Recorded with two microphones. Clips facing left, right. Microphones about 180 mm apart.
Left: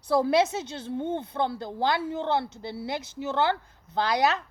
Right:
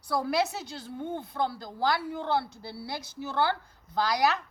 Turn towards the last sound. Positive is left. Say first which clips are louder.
# left 2 dB
turn(degrees=25)  # may be behind; listen again after turning